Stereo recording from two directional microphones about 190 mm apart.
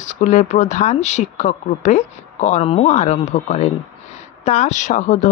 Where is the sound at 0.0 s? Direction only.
40° left (ahead or behind).